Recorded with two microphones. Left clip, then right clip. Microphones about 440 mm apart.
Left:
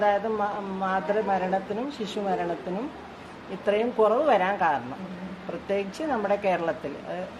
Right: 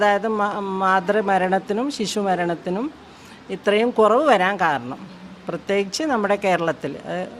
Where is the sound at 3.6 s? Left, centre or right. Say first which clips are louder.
Right 6 dB; right.